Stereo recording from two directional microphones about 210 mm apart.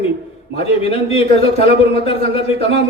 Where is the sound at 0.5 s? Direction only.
25° left (ahead or behind).